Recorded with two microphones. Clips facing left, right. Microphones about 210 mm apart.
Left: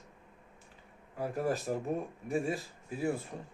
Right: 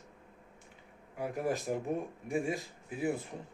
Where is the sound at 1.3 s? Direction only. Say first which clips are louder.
Left 1 dB; 15° right (ahead or behind).